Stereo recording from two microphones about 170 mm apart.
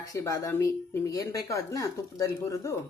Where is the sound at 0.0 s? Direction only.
20° left (ahead or behind).